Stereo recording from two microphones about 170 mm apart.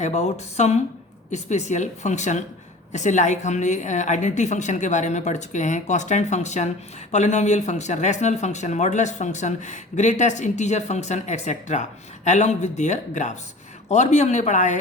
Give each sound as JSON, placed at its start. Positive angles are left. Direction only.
{"t": 0.0, "sound": "speech", "side_deg": 40}